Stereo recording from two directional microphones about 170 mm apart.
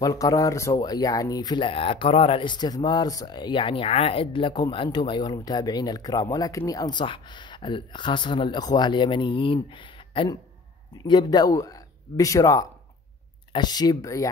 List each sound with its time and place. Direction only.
0.0 s speech: 20° left (ahead or behind)